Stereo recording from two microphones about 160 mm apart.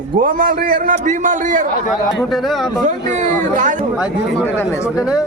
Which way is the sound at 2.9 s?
50° right (ahead or behind).